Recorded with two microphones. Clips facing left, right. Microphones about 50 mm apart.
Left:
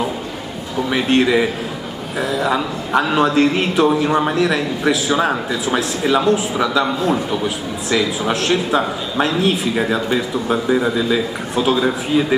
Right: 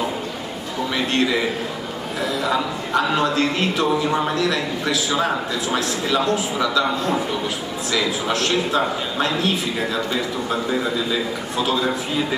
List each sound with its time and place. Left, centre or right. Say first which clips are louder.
0.8 s a man's voice: left 5 dB; centre
8.3 s a man's voice: left 4 dB; centre